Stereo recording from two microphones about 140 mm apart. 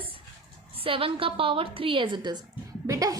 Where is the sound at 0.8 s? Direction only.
40° right (ahead or behind).